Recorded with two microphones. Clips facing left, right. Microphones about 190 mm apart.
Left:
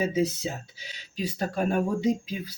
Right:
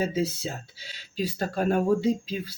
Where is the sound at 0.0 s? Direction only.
15° left (ahead or behind).